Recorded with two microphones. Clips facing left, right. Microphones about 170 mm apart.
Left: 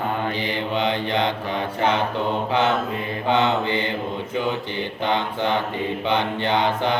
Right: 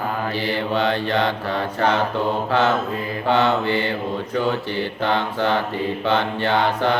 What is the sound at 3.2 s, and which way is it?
Mantra, 20° left (ahead or behind).